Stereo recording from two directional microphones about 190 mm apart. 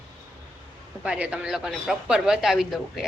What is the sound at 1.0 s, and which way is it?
A woman's voice, 5° right (ahead or behind).